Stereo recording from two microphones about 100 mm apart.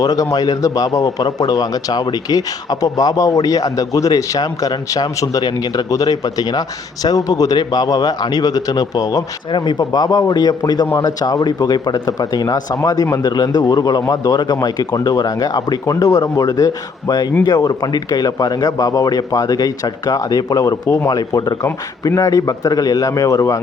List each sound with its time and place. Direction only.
0.0 s a man's voice: 35° left (ahead or behind)
9.5 s a man's voice: 50° left (ahead or behind); by 13.2 s 30° left (ahead or behind)
13.2 s a man's voice: 45° left (ahead or behind)